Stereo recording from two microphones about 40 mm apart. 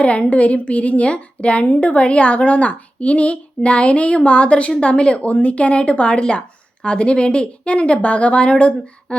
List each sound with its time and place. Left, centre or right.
0.0 s a woman's voice: left